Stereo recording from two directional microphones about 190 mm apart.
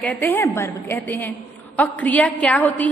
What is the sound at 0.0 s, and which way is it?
A woman's voice, 10° left (ahead or behind).